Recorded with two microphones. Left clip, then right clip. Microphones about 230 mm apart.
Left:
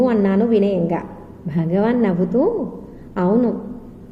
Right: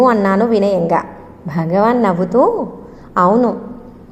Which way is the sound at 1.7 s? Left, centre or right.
Centre.